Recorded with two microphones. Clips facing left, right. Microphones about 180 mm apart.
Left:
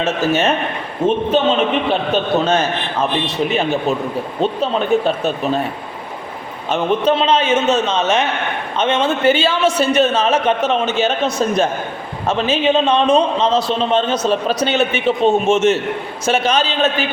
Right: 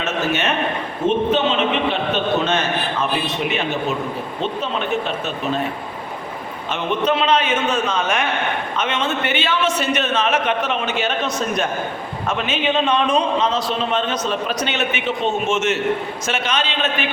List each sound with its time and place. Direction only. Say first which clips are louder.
0.0 s a man's voice: left 5 dB; 35° left (ahead or behind)
4.4 s a man's voice: left 6 dB; 40° left (ahead or behind)
6.7 s a man's voice: left 5 dB; 35° left (ahead or behind)